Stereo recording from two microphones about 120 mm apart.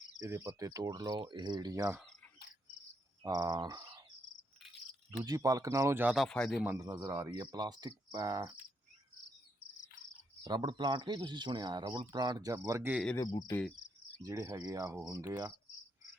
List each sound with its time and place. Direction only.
0.2 s speech: 25° right (ahead or behind)
3.2 s speech: 30° right (ahead or behind)
5.2 s cricket: 30° right (ahead or behind)
6.1 s speech: 5° left (ahead or behind)
6.7 s cricket: 25° right (ahead or behind)
7.3 s speech: 35° right (ahead or behind)
10.4 s speech: 40° right (ahead or behind)
13.1 s cricket: 35° left (ahead or behind)
14.2 s cricket: 25° right (ahead or behind)